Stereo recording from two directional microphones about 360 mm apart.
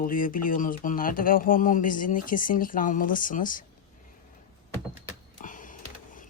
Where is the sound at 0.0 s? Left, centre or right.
Left.